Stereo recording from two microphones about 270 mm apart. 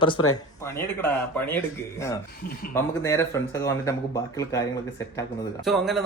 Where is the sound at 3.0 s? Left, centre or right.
Centre.